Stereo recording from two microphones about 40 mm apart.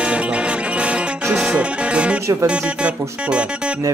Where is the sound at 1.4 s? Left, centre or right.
Right.